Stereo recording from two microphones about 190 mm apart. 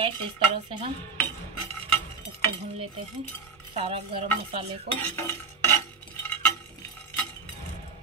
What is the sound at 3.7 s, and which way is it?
Stir, 30° right (ahead or behind).